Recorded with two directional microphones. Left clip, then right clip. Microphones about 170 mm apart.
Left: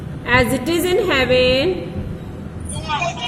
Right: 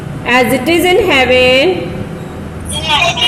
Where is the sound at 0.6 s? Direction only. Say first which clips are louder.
Right 8 dB; 35° left (ahead or behind).